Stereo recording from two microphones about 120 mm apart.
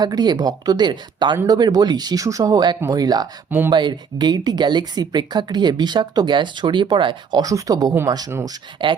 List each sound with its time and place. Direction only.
0.0 s speech: 35° right (ahead or behind)
8.4 s speech: 40° right (ahead or behind)